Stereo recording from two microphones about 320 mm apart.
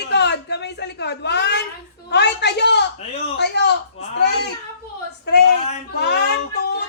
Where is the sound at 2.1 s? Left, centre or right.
Left.